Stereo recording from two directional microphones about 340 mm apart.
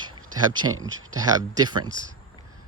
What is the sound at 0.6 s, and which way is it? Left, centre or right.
Speech, right.